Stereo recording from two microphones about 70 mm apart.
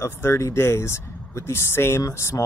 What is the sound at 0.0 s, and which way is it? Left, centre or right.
Speech, left.